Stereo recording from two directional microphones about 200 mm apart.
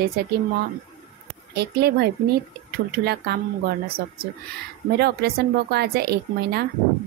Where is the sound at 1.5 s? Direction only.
55° right (ahead or behind).